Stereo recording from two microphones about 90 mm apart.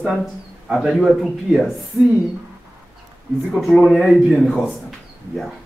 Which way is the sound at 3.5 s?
Centre (ahead or behind).